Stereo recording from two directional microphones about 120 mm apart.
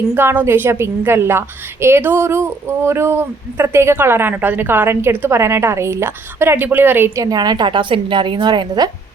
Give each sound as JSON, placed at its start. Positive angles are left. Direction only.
{"t": 0.1, "sound": "a woman's voice", "side_deg": -20}
{"t": 7.3, "sound": "a woman's voice", "side_deg": -35}